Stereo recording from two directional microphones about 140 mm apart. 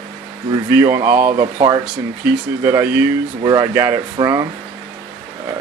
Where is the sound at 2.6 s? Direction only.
15° right (ahead or behind).